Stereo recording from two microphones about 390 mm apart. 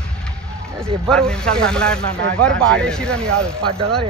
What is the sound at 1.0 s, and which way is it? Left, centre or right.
Speech, centre.